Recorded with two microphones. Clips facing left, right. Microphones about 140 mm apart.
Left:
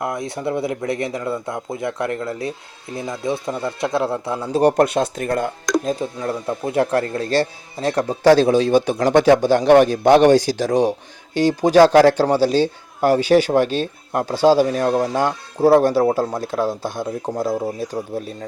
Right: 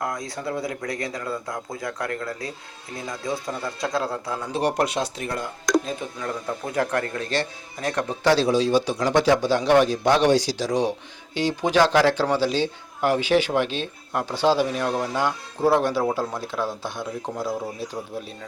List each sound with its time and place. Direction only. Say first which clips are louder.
0.0 s speech: left 5 dB; 25° left (ahead or behind)
4.5 s a man's voice: left 8 dB; 50° left (ahead or behind)
6.0 s a man's voice: left 6 dB; 30° left (ahead or behind)